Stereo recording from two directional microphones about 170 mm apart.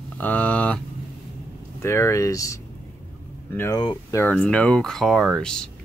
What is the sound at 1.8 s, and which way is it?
Speech, 15° left (ahead or behind).